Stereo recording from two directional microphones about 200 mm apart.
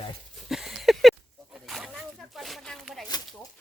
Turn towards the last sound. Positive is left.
turn(degrees=0)  # may be behind; listen again after turning